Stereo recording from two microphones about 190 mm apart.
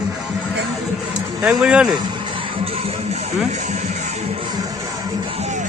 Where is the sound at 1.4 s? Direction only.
5° right (ahead or behind).